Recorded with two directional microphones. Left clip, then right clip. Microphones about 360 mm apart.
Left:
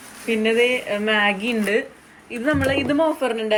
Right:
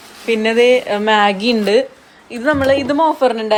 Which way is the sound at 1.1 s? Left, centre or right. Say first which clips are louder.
Right 6 dB; right.